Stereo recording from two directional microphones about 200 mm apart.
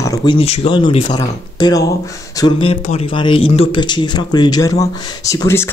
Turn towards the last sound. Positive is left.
turn(degrees=15)  # may be behind; listen again after turning